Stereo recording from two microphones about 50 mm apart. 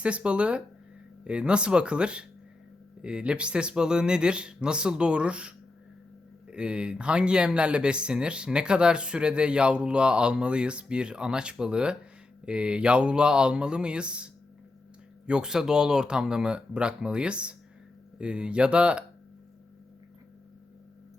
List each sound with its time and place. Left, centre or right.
0.0 s speech: right
15.3 s speech: centre